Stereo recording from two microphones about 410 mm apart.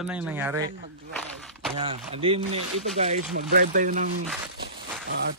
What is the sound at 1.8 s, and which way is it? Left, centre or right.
Speech, centre.